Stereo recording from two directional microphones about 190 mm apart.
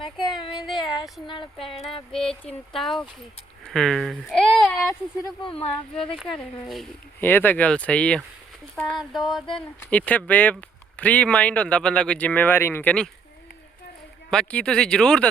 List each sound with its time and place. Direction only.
0.2 s child singing: centre (ahead or behind)
1.5 s speech: centre (ahead or behind)
5.2 s speech: 25° left (ahead or behind)
6.1 s speech: centre (ahead or behind)
14.3 s speech: 5° left (ahead or behind)